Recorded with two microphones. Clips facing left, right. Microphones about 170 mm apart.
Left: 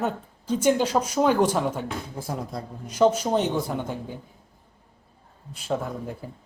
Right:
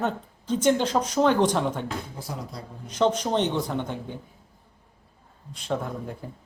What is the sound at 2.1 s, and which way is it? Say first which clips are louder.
Speech: left 4 dB; 50° left (ahead or behind).